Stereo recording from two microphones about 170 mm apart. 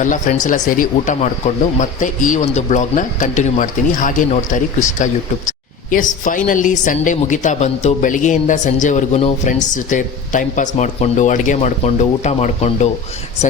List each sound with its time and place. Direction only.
0.0 s a woman's voice: 50° left (ahead or behind)